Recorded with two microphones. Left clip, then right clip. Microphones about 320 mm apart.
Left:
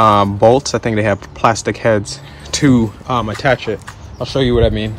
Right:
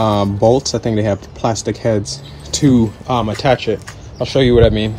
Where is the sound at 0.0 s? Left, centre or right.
Centre.